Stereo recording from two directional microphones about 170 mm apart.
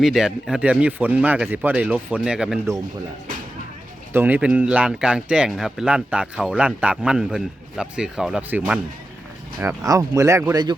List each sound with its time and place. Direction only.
0.0 s speech: centre (ahead or behind)
4.1 s speech: 10° right (ahead or behind)